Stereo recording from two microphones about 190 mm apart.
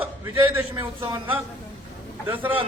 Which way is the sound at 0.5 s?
15° right (ahead or behind).